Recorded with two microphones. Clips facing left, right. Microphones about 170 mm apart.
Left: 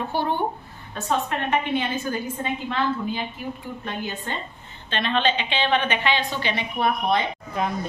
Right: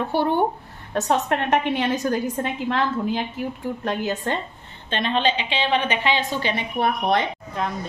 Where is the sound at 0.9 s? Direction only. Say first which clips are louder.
Right 4 dB; 80° right.